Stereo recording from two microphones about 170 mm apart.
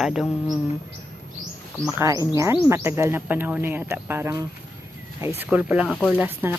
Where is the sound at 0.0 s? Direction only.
Centre (ahead or behind).